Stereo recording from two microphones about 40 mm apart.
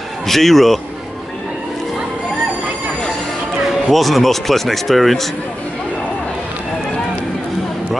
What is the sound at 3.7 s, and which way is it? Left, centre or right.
Speech, centre.